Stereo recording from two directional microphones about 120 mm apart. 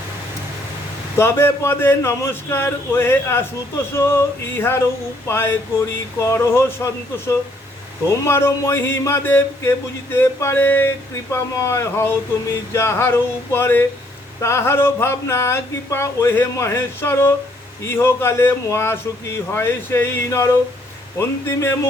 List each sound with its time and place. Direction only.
1.2 s speech: 20° left (ahead or behind)
8.1 s speech: 20° left (ahead or behind)